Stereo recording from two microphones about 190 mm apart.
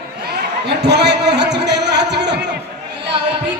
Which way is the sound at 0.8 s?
60° right (ahead or behind).